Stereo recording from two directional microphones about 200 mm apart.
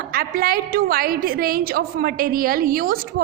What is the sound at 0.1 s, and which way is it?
A woman's voice, 45° right (ahead or behind).